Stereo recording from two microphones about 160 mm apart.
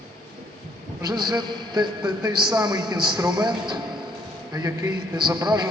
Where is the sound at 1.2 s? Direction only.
25° right (ahead or behind).